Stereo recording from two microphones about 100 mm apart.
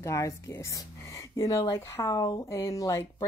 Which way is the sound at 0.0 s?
30° left (ahead or behind).